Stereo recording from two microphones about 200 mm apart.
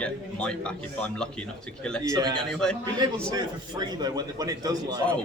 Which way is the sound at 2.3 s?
5° left (ahead or behind).